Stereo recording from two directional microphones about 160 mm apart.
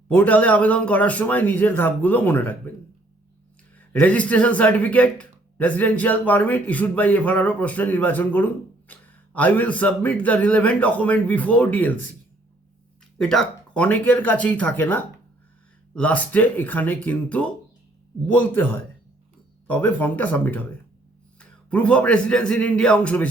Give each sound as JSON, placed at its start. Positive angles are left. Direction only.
{"t": 0.1, "sound": "a man's voice", "side_deg": 10}
{"t": 3.8, "sound": "a man's voice", "side_deg": 10}
{"t": 13.1, "sound": "a man's voice", "side_deg": 5}